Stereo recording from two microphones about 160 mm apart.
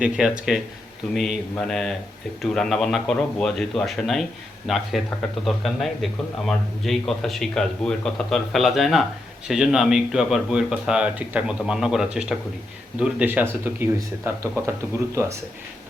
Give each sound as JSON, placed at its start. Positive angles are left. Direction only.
{"t": 0.0, "sound": "speech", "side_deg": -5}